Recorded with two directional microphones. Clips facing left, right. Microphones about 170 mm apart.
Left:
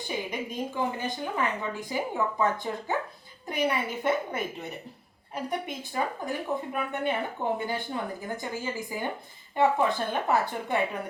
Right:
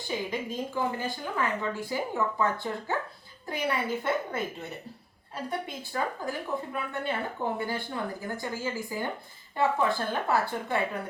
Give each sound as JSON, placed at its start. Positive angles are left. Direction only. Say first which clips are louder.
{"t": 0.0, "sound": "speech", "louder": "right 1 dB", "side_deg": 20}